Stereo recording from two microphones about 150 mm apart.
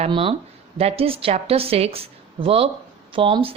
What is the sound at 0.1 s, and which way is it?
A woman's voice, 35° right (ahead or behind).